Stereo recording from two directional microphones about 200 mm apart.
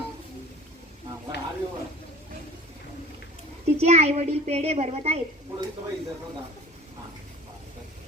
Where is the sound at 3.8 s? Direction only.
30° right (ahead or behind).